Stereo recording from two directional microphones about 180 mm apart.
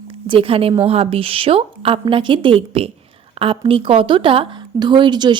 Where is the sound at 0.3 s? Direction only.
30° right (ahead or behind).